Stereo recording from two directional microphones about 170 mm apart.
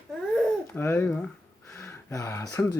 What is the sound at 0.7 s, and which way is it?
Speech, 15° left (ahead or behind).